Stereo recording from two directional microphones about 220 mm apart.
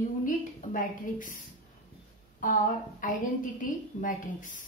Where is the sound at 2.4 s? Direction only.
35° left (ahead or behind).